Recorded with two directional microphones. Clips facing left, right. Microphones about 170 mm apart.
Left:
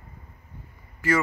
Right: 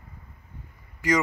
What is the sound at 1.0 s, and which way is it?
Speech, 15° right (ahead or behind).